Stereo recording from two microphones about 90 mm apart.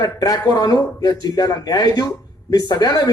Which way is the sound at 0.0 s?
45° left (ahead or behind).